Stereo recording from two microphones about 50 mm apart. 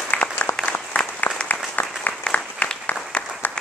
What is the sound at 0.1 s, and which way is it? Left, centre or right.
Applause, left.